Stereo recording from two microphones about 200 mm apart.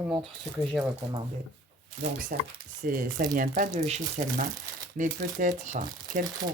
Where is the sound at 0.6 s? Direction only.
Centre (ahead or behind).